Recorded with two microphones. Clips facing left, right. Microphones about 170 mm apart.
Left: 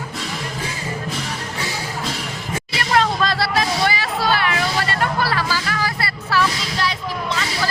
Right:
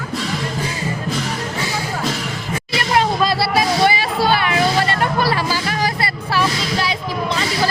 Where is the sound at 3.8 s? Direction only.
15° right (ahead or behind).